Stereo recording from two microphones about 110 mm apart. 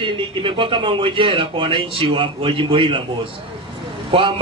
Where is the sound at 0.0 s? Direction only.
50° right (ahead or behind).